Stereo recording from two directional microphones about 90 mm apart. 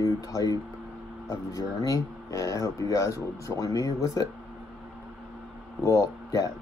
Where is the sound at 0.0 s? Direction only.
40° left (ahead or behind).